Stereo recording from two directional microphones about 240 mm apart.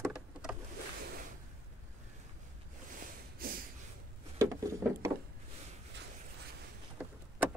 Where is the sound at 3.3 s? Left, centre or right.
Right.